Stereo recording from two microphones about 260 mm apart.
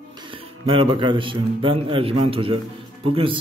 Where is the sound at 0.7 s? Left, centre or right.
Centre.